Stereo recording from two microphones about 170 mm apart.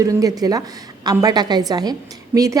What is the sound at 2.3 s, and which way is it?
Speech, 10° right (ahead or behind).